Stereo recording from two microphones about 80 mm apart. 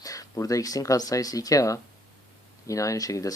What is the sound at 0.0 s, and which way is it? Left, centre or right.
Speech, left.